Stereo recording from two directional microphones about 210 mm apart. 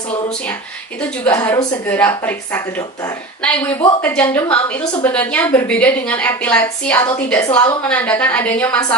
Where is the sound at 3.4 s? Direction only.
5° left (ahead or behind).